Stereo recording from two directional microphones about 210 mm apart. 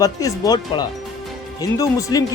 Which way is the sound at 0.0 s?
15° left (ahead or behind).